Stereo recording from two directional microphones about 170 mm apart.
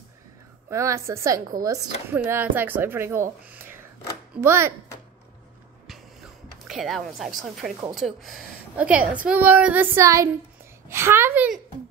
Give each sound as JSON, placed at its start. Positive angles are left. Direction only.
{"t": 0.7, "sound": "a woman's voice", "side_deg": -15}
{"t": 3.4, "sound": "a sound", "side_deg": -10}
{"t": 4.4, "sound": "a woman's voice", "side_deg": -15}
{"t": 6.7, "sound": "a woman's voice", "side_deg": 0}